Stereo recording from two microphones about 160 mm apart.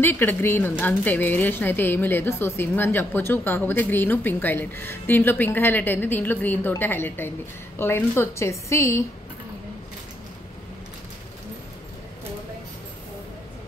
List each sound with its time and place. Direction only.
0.0 s speech: 15° left (ahead or behind)